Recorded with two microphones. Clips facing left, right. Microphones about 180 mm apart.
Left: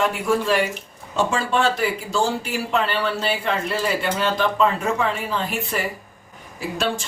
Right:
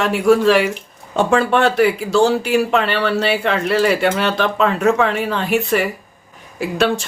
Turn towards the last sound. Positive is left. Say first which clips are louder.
# right 7 dB
turn(degrees=-70)  # may be behind; listen again after turning